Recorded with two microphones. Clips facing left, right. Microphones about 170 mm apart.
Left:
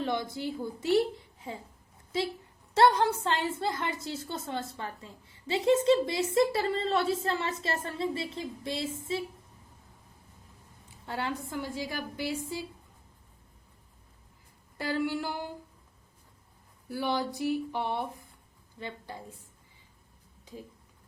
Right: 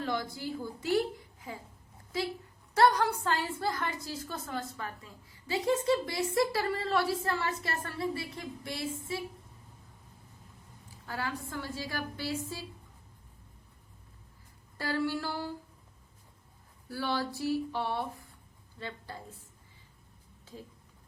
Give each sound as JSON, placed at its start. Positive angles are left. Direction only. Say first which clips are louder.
{"t": 0.0, "sound": "a woman's voice", "louder": "left 3 dB", "side_deg": 20}
{"t": 2.7, "sound": "a woman's voice", "louder": "left 2 dB", "side_deg": 25}
{"t": 11.0, "sound": "a woman's voice", "louder": "left 3 dB", "side_deg": 25}
{"t": 14.8, "sound": "a woman's voice", "louder": "left 1 dB", "side_deg": 20}
{"t": 16.9, "sound": "a woman's voice", "louder": "left 2 dB", "side_deg": 20}